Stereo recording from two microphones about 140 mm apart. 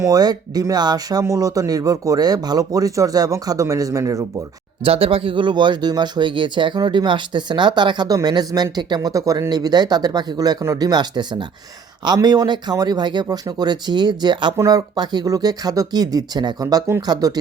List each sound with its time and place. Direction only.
0.0 s speech: 25° right (ahead or behind)
4.8 s speech: 40° right (ahead or behind); by 17.3 s 25° right (ahead or behind)